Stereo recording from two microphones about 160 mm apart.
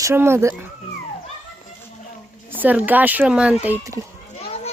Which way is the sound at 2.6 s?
10° right (ahead or behind).